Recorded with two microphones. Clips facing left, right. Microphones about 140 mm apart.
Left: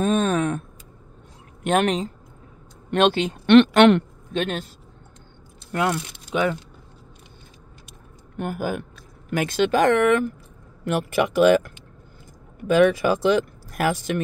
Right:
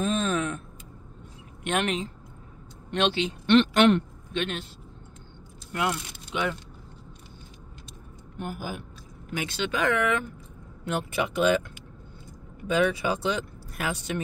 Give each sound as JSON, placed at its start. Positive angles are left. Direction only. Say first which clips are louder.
{"t": 0.0, "sound": "a sound", "louder": "left 6 dB", "side_deg": 50}
{"t": 1.6, "sound": "speech", "louder": "left 7 dB", "side_deg": 40}
{"t": 3.4, "sound": "a woman's voice", "louder": "left 6 dB", "side_deg": 70}
{"t": 4.3, "sound": "speech", "louder": "left 5 dB", "side_deg": 40}
{"t": 5.7, "sound": "speech", "louder": "left 5 dB", "side_deg": 50}
{"t": 8.4, "sound": "speech", "louder": "left 8 dB", "side_deg": 60}
{"t": 10.8, "sound": "speech", "louder": "left 6 dB", "side_deg": 70}
{"t": 12.6, "sound": "speech", "louder": "left 7 dB", "side_deg": 80}